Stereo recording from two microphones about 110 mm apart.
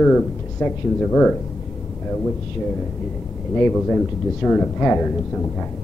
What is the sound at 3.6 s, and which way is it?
Speech, 10° left (ahead or behind).